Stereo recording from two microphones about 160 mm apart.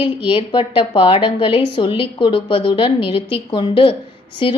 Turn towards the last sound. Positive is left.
turn(degrees=35)  # may be behind; listen again after turning